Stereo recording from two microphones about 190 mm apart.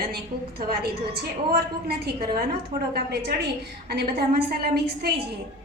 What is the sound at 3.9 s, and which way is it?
A woman's voice, 55° right (ahead or behind).